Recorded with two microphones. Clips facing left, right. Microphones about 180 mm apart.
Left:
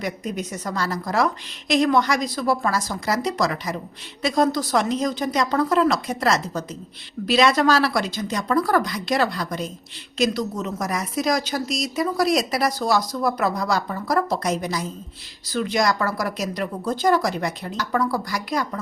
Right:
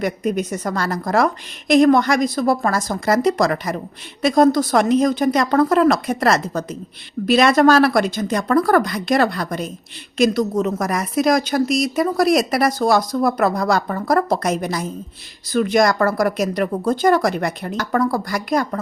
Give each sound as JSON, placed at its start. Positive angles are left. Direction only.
{"t": 0.0, "sound": "a woman's voice", "side_deg": -55}